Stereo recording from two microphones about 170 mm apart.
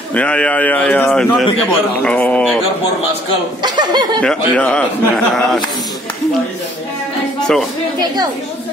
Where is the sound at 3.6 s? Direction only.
25° right (ahead or behind).